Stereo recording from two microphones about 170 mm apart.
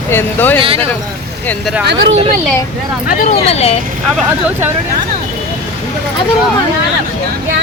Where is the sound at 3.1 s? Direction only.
50° left (ahead or behind).